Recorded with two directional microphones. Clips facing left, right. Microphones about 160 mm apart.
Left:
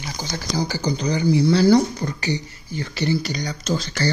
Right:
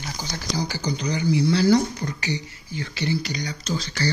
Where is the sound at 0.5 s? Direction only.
35° left (ahead or behind).